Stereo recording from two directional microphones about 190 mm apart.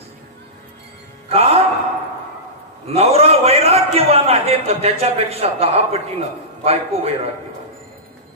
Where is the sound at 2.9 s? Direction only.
30° right (ahead or behind).